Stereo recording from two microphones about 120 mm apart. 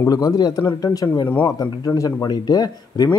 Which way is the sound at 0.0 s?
30° left (ahead or behind).